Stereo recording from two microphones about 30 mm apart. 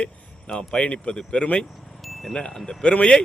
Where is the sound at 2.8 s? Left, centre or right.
Left.